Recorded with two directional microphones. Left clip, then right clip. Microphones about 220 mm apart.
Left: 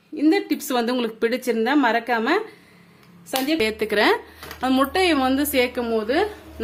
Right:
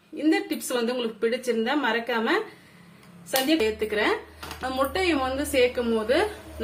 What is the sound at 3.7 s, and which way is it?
A woman's voice, 50° left (ahead or behind).